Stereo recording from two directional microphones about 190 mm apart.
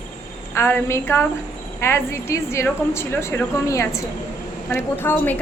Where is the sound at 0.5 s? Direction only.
10° left (ahead or behind).